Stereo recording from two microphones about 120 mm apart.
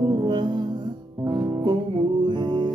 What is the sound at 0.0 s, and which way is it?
Music, 35° right (ahead or behind).